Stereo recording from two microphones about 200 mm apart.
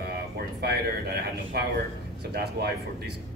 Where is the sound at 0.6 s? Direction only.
50° right (ahead or behind).